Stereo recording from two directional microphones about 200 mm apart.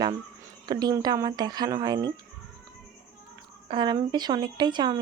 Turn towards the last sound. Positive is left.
turn(degrees=-20)  # may be behind; listen again after turning